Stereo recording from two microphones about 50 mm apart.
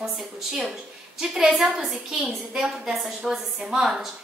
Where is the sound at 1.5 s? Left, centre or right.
Centre.